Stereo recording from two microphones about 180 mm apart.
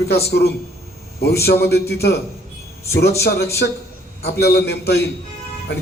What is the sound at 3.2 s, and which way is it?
Speech, 65° left (ahead or behind).